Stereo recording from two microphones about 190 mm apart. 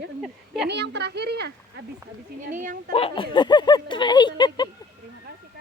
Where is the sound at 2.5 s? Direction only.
40° right (ahead or behind).